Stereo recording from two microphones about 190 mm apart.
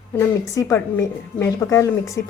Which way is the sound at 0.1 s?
15° left (ahead or behind).